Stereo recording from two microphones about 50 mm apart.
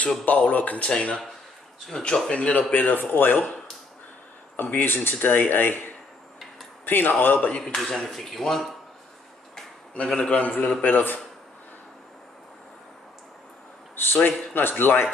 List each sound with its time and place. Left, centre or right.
0.2 s speech: left
0.8 s a man's voice: centre
2.3 s a man's voice: left
2.7 s speech: left
4.6 s speech: left
6.9 s speech: left
7.6 s a man's voice: centre
9.9 s a man's voice: left
13.9 s a man's voice: left